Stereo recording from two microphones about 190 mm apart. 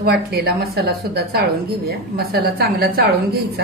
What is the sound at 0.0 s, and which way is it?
A woman's voice, 55° right (ahead or behind).